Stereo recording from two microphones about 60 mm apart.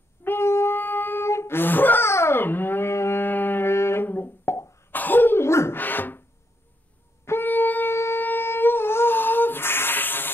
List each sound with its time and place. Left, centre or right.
0.2 s a sound: left
0.7 s music: left
1.2 s a sound: left
2.0 s dog: left
4.1 s guitar: left
4.9 s cough: left
5.4 s beatboxing: left
5.8 s a sound: left
7.2 s shofar: left
7.9 s humming: left